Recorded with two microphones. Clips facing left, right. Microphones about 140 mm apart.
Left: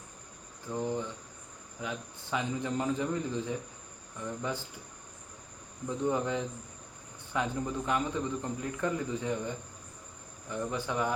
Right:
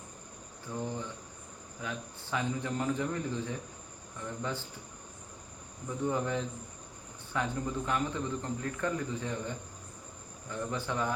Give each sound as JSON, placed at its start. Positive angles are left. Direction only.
{"t": 0.7, "sound": "speech", "side_deg": 20}
{"t": 6.1, "sound": "speech", "side_deg": 15}